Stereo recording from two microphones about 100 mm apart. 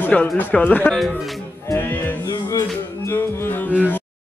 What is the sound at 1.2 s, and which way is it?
Music, centre (ahead or behind).